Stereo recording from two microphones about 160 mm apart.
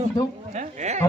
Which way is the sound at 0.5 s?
45° right (ahead or behind).